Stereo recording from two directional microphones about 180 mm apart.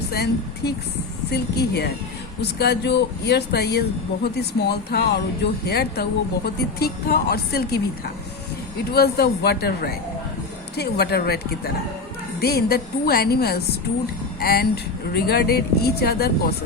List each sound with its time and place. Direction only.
0.1 s speech: 60° left (ahead or behind)
8.9 s speech: 60° left (ahead or behind)